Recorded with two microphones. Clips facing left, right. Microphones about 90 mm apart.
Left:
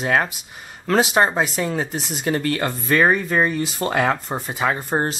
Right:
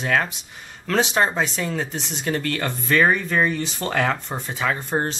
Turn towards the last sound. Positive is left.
turn(degrees=10)  # may be behind; listen again after turning